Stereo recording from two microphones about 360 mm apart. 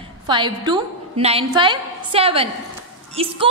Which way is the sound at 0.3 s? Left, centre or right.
Centre.